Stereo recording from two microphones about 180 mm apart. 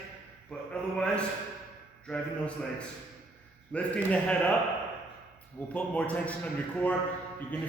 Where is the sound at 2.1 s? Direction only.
5° left (ahead or behind).